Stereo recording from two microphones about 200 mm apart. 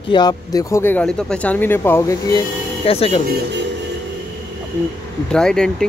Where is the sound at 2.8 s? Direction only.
30° left (ahead or behind).